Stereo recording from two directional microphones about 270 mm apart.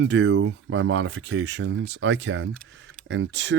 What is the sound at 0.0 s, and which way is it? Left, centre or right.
Speech, right.